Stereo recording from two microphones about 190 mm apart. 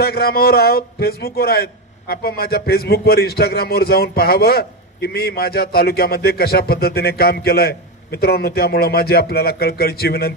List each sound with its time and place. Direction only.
0.0 s a man's voice: 55° left (ahead or behind)